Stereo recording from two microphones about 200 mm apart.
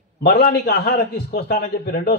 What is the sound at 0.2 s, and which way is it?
A man's voice, 50° left (ahead or behind).